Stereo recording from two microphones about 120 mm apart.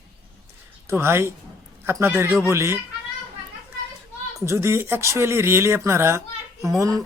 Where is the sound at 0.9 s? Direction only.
20° right (ahead or behind).